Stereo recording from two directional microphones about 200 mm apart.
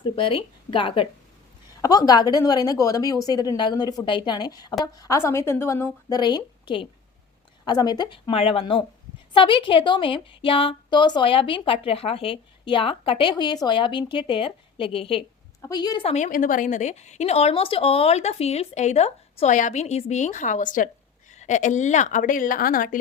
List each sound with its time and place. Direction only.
0.0 s a woman's voice: 25° left (ahead or behind); by 23.0 s 45° left (ahead or behind)